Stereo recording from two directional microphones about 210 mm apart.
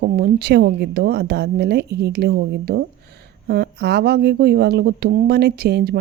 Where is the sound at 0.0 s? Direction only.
45° right (ahead or behind).